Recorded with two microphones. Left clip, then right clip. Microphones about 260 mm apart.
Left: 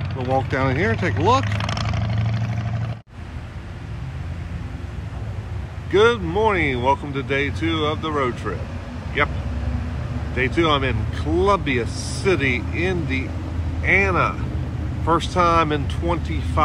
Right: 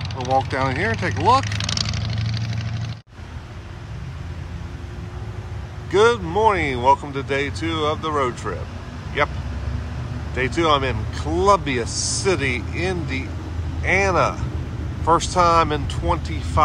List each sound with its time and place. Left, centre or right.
0.0 s vehicle: centre
0.3 s speech: centre
1.4 s vehicle: centre
5.9 s speech: centre